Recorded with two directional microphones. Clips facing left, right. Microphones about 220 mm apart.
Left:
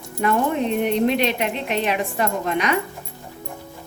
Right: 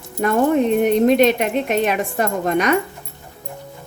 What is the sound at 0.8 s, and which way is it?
A woman's voice, 45° right (ahead or behind).